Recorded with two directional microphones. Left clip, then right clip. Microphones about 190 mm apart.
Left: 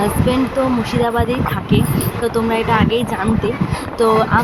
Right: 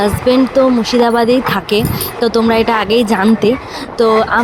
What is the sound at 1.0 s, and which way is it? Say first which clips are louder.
Speech: right 7 dB; 25° right (ahead or behind).